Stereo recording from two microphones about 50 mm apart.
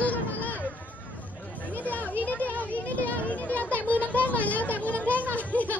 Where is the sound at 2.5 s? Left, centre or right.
Left.